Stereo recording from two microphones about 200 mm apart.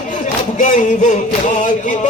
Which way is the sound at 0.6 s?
40° left (ahead or behind).